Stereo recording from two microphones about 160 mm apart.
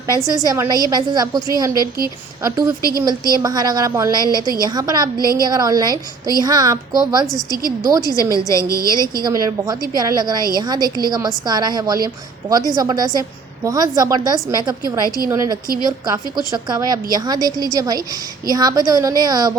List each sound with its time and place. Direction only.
0.3 s a woman's voice: 20° right (ahead or behind)
4.3 s a woman's voice: 20° left (ahead or behind)
4.6 s a woman's voice: 25° right (ahead or behind)
8.0 s a woman's voice: 20° left (ahead or behind)
9.2 s a woman's voice: 20° right (ahead or behind)